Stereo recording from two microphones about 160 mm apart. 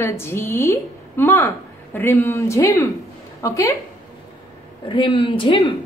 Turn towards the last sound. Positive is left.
turn(degrees=30)  # may be behind; listen again after turning